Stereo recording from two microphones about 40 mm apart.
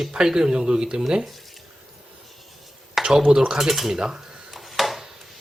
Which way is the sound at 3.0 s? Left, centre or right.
Centre.